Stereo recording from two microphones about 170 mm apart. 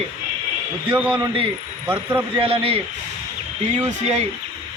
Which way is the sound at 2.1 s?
35° right (ahead or behind).